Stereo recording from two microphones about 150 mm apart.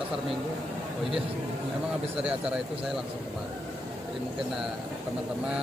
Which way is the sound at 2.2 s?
5° right (ahead or behind).